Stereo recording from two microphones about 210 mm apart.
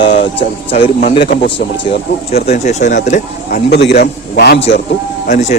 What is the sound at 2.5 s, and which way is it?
Speech, 35° left (ahead or behind).